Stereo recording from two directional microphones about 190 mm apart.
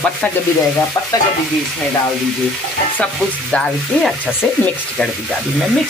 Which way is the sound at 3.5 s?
5° left (ahead or behind).